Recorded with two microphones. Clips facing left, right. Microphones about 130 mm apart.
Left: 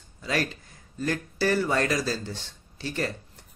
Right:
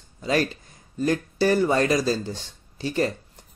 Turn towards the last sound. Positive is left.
turn(degrees=-15)  # may be behind; listen again after turning